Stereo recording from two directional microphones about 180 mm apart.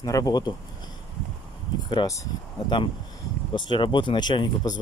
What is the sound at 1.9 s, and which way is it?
Speech, 20° left (ahead or behind).